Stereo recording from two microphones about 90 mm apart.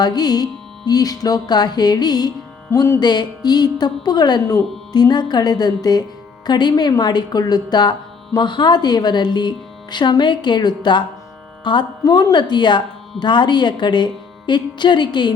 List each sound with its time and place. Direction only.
0.0 s speech: 50° left (ahead or behind)